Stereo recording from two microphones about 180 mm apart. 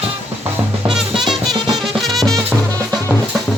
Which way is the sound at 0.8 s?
Centre (ahead or behind).